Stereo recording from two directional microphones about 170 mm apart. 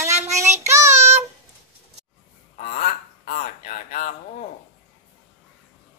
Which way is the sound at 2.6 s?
40° left (ahead or behind).